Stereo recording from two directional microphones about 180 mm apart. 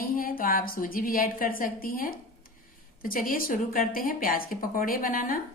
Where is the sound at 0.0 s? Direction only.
50° left (ahead or behind).